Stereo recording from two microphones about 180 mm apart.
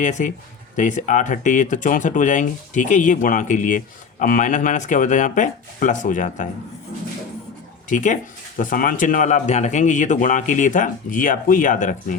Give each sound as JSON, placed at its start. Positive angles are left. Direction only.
{"t": 0.0, "sound": "speech", "side_deg": 45}
{"t": 7.9, "sound": "speech", "side_deg": 45}